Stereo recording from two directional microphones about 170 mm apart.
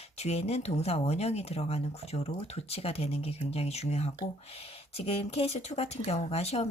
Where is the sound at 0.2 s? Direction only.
40° left (ahead or behind).